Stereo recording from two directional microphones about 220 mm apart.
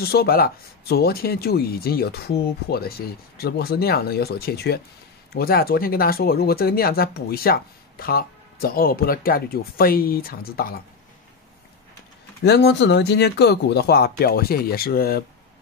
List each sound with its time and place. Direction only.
0.0 s speech: 45° left (ahead or behind)
12.4 s speech: 50° left (ahead or behind)